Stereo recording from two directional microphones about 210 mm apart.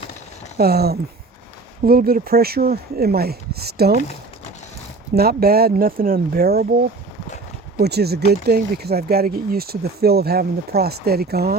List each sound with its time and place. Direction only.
0.5 s speech: 50° right (ahead or behind)
5.1 s speech: 45° right (ahead or behind)